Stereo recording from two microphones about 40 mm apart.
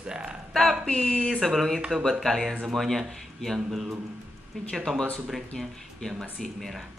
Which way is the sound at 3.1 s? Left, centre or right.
Centre.